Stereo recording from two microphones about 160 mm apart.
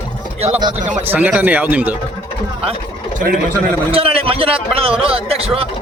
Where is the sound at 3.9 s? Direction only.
35° right (ahead or behind).